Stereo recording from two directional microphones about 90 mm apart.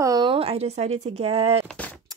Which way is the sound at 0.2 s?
85° right.